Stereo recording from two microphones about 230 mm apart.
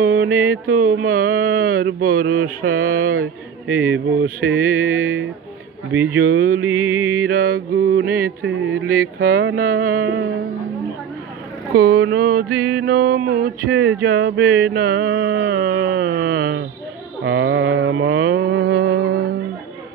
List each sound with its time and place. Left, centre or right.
0.0 s mantra: right
0.3 s mantra: right
1.1 s a sound: right
2.1 s mantra: right
4.9 s speech: right
5.9 s music: centre
6.2 s mantra: right
6.9 s music: centre
7.3 s mantra: right
9.6 s a sound: right
11.7 s mantra: right
17.2 s mantra: right